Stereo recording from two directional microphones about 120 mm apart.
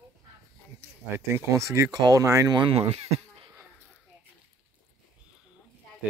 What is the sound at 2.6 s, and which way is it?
Speech, 55° right (ahead or behind).